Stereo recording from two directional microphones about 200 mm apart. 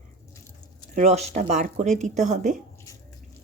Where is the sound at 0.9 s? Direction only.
35° right (ahead or behind).